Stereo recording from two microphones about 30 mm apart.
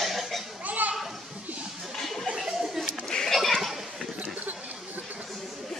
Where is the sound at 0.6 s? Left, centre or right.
Right.